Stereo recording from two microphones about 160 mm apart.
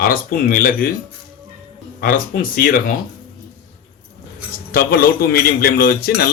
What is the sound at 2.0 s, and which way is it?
Speech, 60° left (ahead or behind).